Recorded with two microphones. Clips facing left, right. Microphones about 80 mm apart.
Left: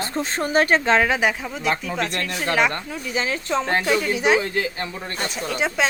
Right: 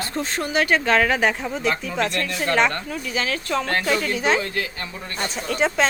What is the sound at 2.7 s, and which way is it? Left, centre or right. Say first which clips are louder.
A woman's voice: even; centre.